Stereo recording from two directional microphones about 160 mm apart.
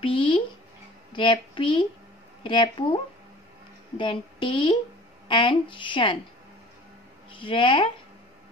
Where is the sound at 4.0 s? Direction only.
30° left (ahead or behind).